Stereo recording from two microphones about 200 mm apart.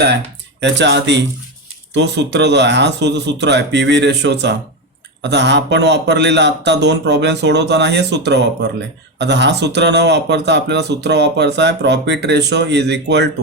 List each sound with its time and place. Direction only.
0.6 s speech: 60° right (ahead or behind)